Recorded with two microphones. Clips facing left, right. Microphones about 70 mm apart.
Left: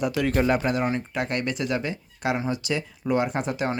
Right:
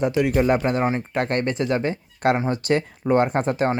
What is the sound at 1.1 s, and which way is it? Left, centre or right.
Speech, right.